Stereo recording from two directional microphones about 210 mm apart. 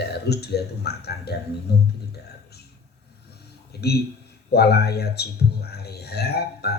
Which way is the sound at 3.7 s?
50° left (ahead or behind).